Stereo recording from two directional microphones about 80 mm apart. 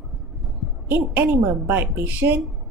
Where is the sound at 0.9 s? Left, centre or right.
Right.